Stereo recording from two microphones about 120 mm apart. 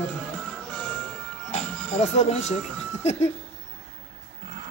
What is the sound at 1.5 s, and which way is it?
Music, 70° left (ahead or behind).